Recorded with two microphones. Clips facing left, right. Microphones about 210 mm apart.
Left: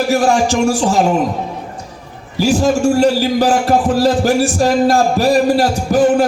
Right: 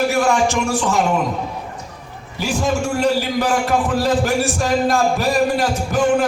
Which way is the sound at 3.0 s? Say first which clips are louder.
Left 5 dB; 35° left (ahead or behind).